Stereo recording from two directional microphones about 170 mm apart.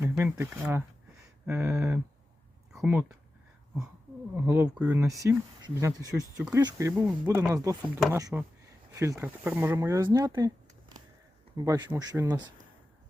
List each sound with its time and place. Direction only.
0.0 s speech: 10° right (ahead or behind)
4.4 s speech: 10° right (ahead or behind)
11.5 s speech: 20° right (ahead or behind)